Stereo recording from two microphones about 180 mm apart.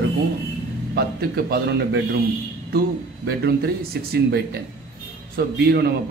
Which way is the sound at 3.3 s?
65° right (ahead or behind).